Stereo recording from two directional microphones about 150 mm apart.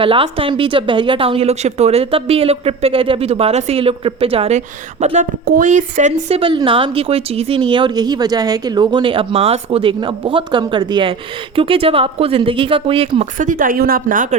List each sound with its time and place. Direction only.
0.0 s a woman's voice: 35° right (ahead or behind)
13.4 s a woman's voice: 60° right (ahead or behind)